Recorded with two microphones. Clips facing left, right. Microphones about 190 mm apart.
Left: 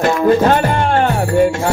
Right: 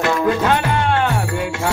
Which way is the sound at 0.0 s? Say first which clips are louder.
Left 5 dB; 45° left (ahead or behind).